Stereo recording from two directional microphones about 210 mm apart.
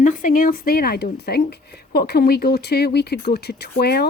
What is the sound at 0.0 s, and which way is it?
Speech, 40° left (ahead or behind).